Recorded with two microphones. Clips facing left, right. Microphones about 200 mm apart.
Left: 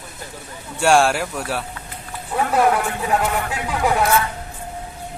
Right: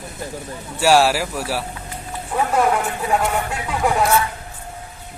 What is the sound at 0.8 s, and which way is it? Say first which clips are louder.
Speech: right 1 dB; 5° right (ahead or behind).